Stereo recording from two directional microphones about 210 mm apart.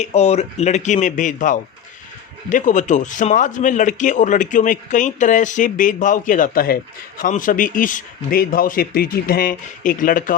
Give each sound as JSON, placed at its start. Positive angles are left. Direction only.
{"t": 0.0, "sound": "a man's voice", "side_deg": 30}